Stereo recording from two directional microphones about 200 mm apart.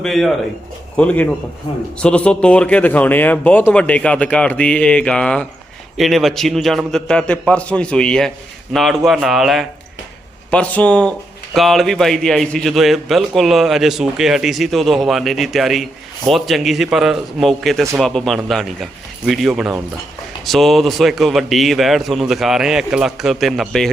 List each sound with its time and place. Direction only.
0.0 s a man's voice: centre (ahead or behind)
1.7 s a man's voice: 25° left (ahead or behind)
2.0 s a man's voice: 5° left (ahead or behind)